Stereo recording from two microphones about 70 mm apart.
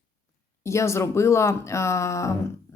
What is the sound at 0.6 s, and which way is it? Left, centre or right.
Speech, left.